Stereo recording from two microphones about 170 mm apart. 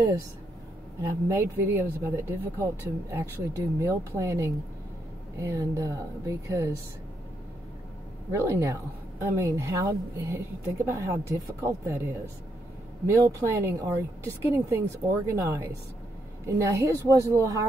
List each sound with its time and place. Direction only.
1.0 s speech: 15° right (ahead or behind)
8.3 s speech: 15° right (ahead or behind)